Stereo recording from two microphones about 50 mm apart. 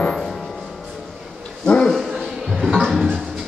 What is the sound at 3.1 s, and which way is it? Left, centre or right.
Music, centre.